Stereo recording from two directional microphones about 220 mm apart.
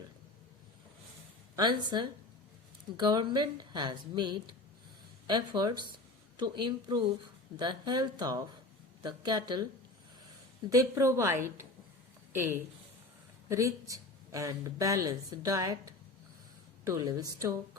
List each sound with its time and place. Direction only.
1.5 s speech: 20° right (ahead or behind)
10.7 s speech: 15° right (ahead or behind)
13.5 s speech: 15° right (ahead or behind)
16.8 s speech: 15° right (ahead or behind)